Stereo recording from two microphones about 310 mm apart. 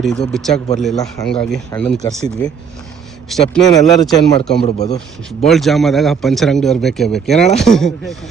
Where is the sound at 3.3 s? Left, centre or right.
Centre.